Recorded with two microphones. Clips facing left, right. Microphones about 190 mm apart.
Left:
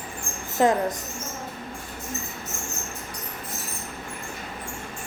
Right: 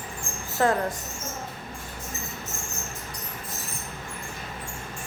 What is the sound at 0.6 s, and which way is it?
Speech, 15° left (ahead or behind).